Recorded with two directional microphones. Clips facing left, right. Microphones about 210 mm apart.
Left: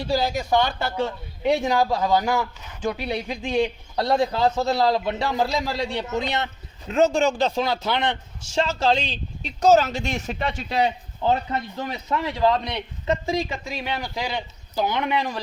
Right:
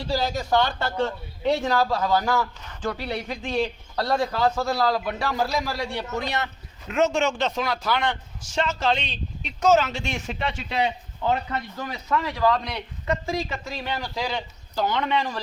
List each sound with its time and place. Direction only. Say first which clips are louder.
0.1 s a man's voice: left 1 dB; 15° left (ahead or behind)